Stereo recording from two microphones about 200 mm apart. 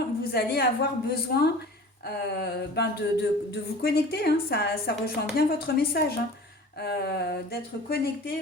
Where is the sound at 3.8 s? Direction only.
50° left (ahead or behind).